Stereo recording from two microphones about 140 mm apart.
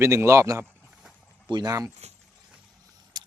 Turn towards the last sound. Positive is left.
turn(degrees=-30)  # may be behind; listen again after turning